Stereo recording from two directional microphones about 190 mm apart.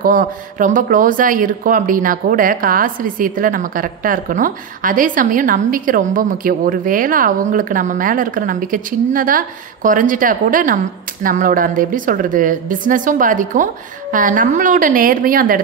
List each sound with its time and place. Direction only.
0.0 s speech: 45° right (ahead or behind)